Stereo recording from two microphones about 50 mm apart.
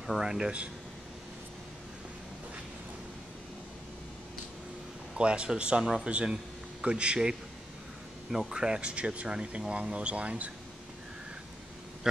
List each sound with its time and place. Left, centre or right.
0.0 s speech: centre
5.1 s a man's voice: right